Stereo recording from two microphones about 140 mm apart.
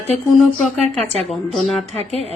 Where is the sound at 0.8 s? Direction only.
50° right (ahead or behind).